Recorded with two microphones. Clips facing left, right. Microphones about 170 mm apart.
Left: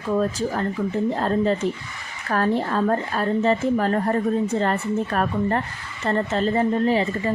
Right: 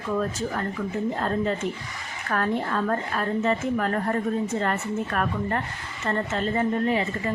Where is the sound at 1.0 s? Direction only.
30° left (ahead or behind).